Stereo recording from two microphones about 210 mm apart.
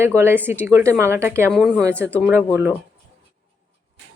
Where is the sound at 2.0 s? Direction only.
5° left (ahead or behind).